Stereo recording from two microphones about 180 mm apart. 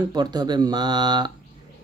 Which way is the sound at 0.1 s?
25° right (ahead or behind).